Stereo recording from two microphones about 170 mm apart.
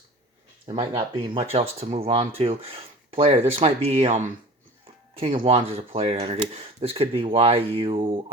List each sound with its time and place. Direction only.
0.7 s speech: 30° right (ahead or behind)
5.2 s speech: 35° right (ahead or behind)